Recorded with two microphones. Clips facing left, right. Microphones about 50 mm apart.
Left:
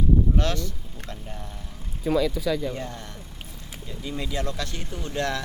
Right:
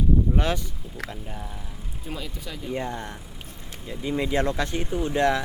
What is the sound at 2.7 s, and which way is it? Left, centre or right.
Speech, right.